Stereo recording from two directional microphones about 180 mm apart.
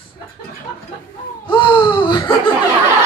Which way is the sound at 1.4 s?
25° left (ahead or behind).